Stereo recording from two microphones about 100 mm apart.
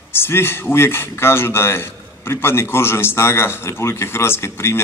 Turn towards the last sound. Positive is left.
turn(degrees=25)  # may be behind; listen again after turning